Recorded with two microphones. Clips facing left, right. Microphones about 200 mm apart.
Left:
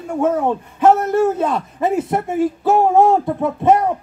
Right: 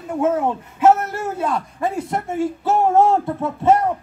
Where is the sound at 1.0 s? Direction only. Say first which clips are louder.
Left 8 dB; 20° left (ahead or behind).